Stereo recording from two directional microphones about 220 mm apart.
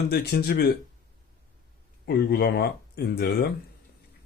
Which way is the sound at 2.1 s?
45° left (ahead or behind).